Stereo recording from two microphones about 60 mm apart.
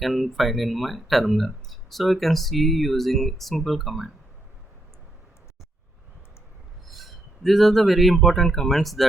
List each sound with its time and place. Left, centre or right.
0.0 s speech: centre
6.8 s speech: centre